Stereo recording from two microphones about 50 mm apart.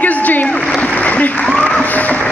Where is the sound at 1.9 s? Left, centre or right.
Left.